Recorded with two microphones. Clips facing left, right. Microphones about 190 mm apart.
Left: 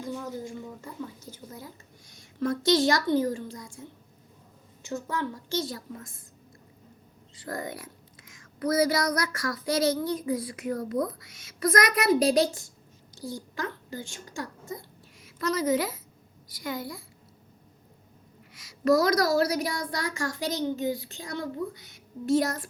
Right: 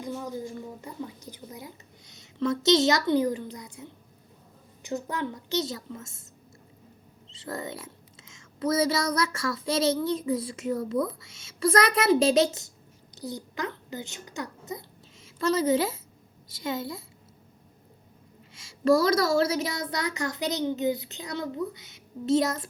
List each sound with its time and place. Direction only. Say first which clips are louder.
0.0 s a woman's voice: right 1 dB; 15° right (ahead or behind)
7.3 s a woman's voice: even; 25° right (ahead or behind)
18.5 s a woman's voice: right 1 dB; 25° right (ahead or behind)